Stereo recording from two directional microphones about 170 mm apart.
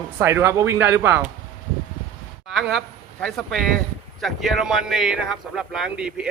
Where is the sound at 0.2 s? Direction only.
15° right (ahead or behind).